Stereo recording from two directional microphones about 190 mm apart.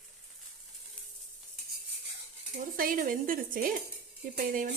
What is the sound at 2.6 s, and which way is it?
Dishes, 45° right (ahead or behind).